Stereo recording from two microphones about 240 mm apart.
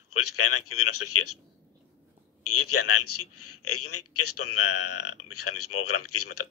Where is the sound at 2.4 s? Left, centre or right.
Left.